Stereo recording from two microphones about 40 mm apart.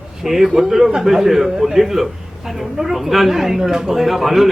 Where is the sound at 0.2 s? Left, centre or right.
Centre.